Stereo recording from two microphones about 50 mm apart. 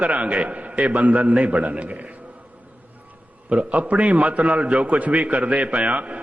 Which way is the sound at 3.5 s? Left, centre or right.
Right.